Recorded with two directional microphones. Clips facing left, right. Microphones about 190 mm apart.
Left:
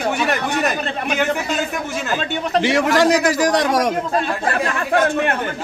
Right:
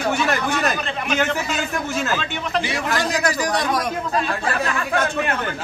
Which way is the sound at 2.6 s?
90° left.